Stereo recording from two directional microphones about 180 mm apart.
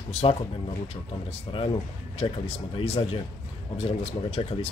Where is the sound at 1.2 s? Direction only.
30° left (ahead or behind).